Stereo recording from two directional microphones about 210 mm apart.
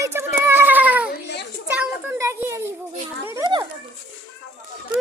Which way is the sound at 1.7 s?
10° right (ahead or behind).